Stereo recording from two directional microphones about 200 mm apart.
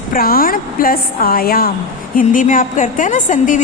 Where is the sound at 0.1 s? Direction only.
45° left (ahead or behind).